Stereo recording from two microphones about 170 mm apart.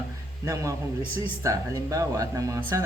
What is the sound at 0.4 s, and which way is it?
Speech, 20° right (ahead or behind).